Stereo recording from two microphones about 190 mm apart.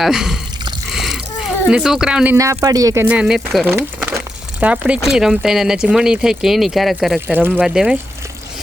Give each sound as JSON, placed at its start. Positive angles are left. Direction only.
{"t": 0.0, "sound": "speech", "side_deg": 0}
{"t": 3.8, "sound": "speech", "side_deg": -15}